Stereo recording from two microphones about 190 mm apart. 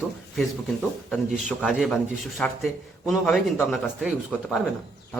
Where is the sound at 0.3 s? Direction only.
Centre (ahead or behind).